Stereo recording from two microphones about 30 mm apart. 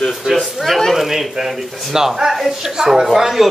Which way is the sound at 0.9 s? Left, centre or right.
Centre.